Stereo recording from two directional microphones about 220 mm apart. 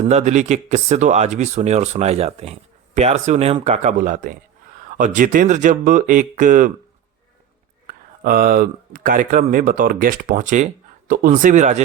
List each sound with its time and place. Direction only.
0.0 s speech: 30° right (ahead or behind)
7.9 s speech: 40° right (ahead or behind)